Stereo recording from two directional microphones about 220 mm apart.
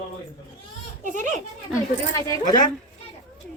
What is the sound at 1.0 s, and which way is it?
Speech, 35° right (ahead or behind).